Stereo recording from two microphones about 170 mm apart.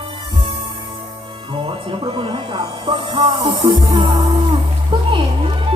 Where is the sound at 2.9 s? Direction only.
30° right (ahead or behind).